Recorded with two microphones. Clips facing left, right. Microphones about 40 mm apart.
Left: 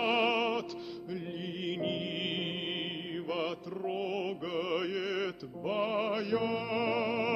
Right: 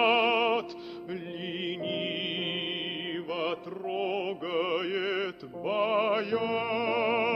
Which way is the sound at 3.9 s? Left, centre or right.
Right.